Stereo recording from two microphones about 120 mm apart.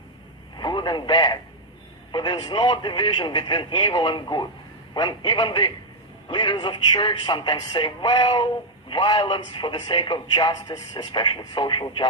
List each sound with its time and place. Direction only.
0.6 s speech: 40° left (ahead or behind)